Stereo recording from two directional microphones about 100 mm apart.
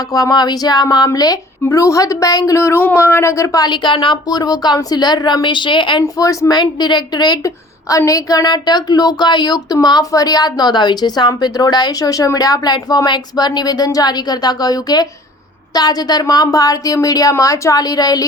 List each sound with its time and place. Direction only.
0.1 s a woman's voice: 40° left (ahead or behind)
6.1 s a woman's voice: 35° left (ahead or behind)